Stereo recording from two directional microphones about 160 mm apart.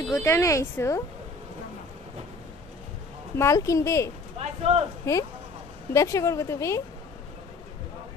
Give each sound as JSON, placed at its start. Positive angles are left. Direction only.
{"t": 0.1, "sound": "speech", "side_deg": 20}
{"t": 3.3, "sound": "speech", "side_deg": 20}
{"t": 4.4, "sound": "speech", "side_deg": -40}
{"t": 5.1, "sound": "speech", "side_deg": 15}